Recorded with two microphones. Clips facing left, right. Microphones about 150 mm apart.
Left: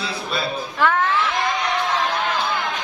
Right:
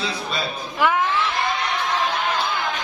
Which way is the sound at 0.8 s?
10° right (ahead or behind).